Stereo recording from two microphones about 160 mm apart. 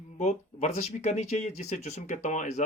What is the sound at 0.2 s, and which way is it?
Speech, 45° left (ahead or behind).